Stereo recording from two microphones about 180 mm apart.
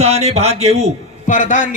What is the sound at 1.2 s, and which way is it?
Speech, 45° left (ahead or behind).